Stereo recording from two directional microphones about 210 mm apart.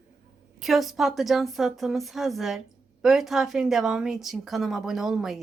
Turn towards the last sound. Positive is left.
turn(degrees=0)  # may be behind; listen again after turning